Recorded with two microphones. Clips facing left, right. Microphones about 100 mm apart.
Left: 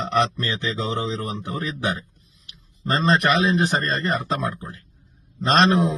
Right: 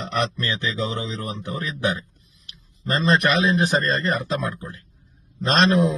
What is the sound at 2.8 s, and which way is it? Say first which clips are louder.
A man's voice: even; 20° left (ahead or behind).